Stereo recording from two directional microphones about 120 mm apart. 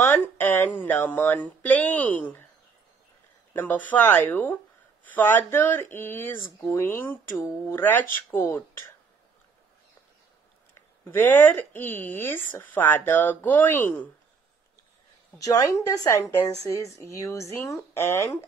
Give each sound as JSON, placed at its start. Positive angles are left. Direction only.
{"t": 0.0, "sound": "speech", "side_deg": 15}
{"t": 3.5, "sound": "speech", "side_deg": 15}
{"t": 11.1, "sound": "speech", "side_deg": 15}
{"t": 15.3, "sound": "speech", "side_deg": 25}